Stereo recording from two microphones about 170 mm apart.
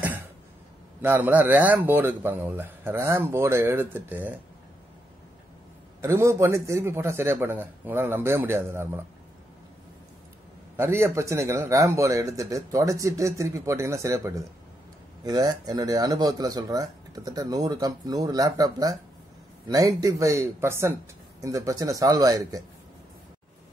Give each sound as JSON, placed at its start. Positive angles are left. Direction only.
{"t": 1.0, "sound": "a man's voice", "side_deg": -10}
{"t": 5.9, "sound": "a man's voice", "side_deg": -15}
{"t": 10.8, "sound": "a man's voice", "side_deg": -15}